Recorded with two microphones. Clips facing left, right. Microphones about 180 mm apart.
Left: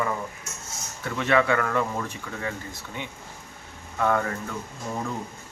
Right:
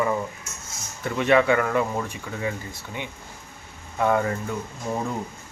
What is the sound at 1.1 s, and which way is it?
Speech, 15° right (ahead or behind).